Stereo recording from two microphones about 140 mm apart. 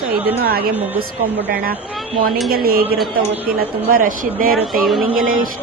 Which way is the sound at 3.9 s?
80° right.